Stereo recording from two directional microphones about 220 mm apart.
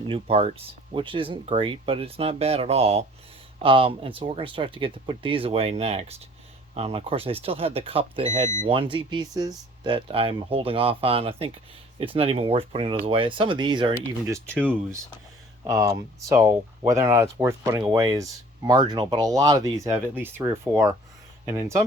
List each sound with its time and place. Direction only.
0.1 s speech: 25° right (ahead or behind)
14.5 s speech: 5° left (ahead or behind)
15.6 s speech: 15° right (ahead or behind)